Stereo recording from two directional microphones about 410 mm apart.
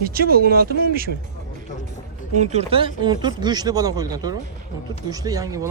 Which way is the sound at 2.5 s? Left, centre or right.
Centre.